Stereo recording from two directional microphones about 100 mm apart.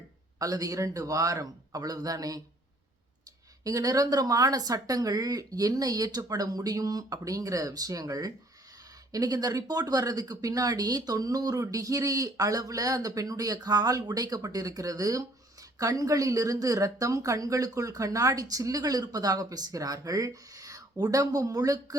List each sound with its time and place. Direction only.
0.3 s a woman's voice: 35° right (ahead or behind)
3.6 s a woman's voice: 35° right (ahead or behind)